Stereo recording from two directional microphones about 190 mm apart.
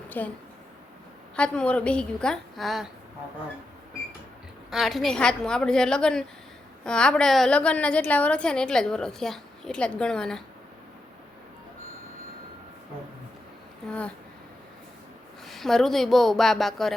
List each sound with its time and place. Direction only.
0.1 s speech: 10° left (ahead or behind)
1.4 s a woman's voice: 5° left (ahead or behind)
4.7 s a woman's voice: centre (ahead or behind)
15.4 s a woman's voice: centre (ahead or behind)